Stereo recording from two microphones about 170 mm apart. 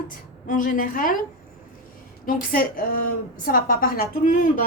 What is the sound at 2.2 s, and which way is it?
A woman's voice, 55° left (ahead or behind).